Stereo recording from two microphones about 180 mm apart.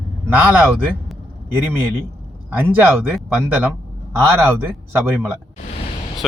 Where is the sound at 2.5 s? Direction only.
10° right (ahead or behind).